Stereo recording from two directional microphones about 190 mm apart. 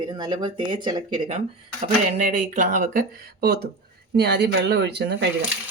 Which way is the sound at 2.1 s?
40° right (ahead or behind).